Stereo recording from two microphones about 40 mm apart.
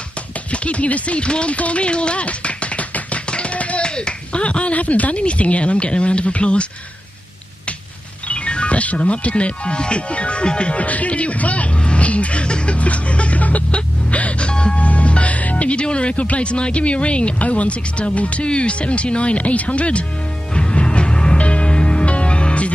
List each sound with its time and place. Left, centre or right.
0.5 s speech: left
8.3 s speech: left
11.8 s a sound: left
12.7 s music: left
14.8 s speech: left
20.5 s music: left